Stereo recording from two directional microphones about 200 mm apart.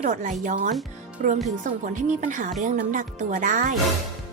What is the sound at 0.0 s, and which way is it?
A woman's voice, 40° right (ahead or behind).